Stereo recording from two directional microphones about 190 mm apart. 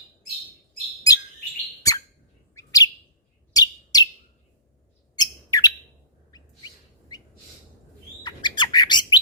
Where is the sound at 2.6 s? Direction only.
15° left (ahead or behind).